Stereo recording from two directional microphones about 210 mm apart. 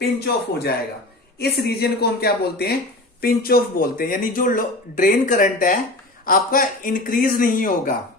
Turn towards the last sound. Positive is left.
turn(degrees=40)  # may be behind; listen again after turning